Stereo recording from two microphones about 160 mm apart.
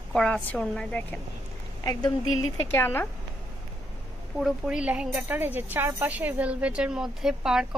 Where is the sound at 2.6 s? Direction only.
15° left (ahead or behind).